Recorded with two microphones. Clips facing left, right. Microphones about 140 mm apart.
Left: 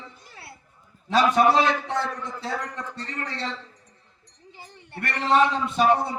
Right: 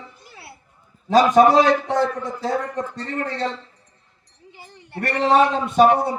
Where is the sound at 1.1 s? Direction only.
45° right (ahead or behind).